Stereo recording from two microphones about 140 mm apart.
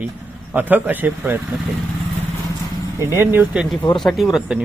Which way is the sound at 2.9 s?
20° right (ahead or behind).